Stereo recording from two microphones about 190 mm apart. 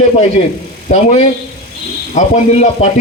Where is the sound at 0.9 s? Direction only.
35° left (ahead or behind).